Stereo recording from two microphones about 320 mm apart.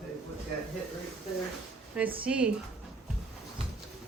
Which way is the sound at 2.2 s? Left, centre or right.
Centre.